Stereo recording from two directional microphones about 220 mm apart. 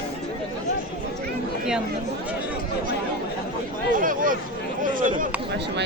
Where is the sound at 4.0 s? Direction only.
40° right (ahead or behind).